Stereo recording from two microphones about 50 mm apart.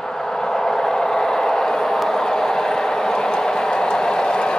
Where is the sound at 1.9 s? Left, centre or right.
Centre.